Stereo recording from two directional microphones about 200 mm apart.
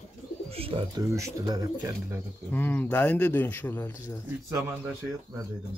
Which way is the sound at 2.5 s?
10° left (ahead or behind).